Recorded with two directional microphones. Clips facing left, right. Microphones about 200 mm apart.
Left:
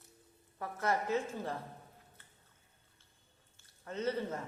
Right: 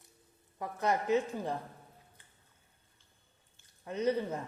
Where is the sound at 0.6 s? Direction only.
20° right (ahead or behind).